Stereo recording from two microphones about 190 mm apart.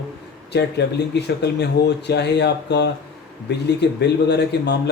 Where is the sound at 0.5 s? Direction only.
60° left (ahead or behind).